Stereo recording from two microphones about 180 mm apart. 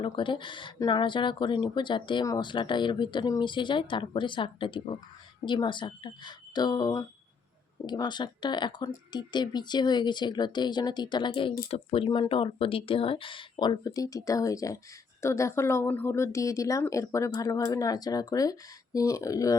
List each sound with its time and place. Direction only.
0.0 s speech: 25° left (ahead or behind)